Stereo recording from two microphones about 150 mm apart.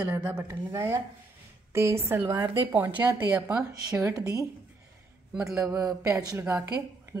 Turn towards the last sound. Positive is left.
turn(degrees=-20)  # may be behind; listen again after turning